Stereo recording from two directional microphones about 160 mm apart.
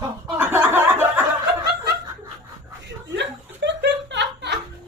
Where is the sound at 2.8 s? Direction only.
90° right.